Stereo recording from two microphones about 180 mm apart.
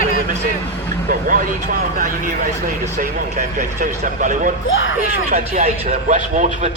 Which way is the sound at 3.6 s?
45° right (ahead or behind).